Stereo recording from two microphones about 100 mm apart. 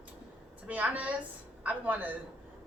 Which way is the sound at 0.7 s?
15° right (ahead or behind).